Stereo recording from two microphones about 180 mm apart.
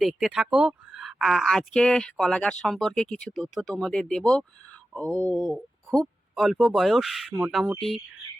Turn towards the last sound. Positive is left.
turn(degrees=0)  # may be behind; listen again after turning